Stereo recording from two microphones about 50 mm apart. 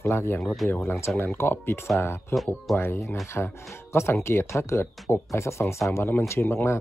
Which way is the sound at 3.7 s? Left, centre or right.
Left.